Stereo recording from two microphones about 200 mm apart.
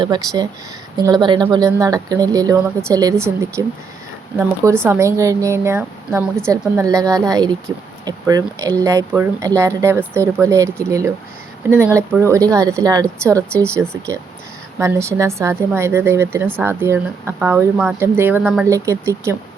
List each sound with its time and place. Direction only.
0.0 s speech: 20° right (ahead or behind)